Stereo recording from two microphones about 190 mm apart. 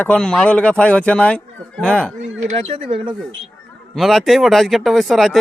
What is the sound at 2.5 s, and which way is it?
Speech, 30° right (ahead or behind).